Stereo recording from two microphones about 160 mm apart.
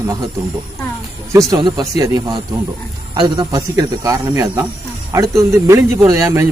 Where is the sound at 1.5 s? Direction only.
25° right (ahead or behind).